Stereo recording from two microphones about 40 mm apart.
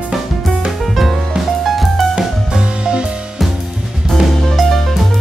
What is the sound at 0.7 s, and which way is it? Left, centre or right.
Music, centre.